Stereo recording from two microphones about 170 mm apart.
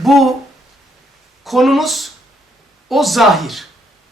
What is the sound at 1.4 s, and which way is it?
A man's voice, centre (ahead or behind).